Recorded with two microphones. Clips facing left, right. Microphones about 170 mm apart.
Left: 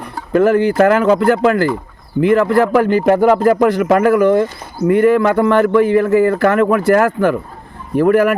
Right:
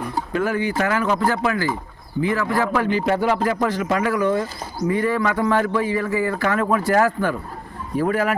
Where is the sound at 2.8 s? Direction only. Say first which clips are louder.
Left 8 dB; 50° left (ahead or behind).